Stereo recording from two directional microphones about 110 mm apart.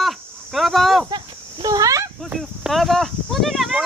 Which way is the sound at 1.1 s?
40° right (ahead or behind).